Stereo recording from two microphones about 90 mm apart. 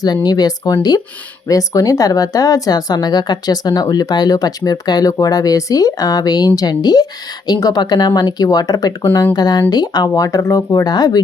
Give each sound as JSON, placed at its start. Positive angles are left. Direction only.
{"t": 0.0, "sound": "speech", "side_deg": 50}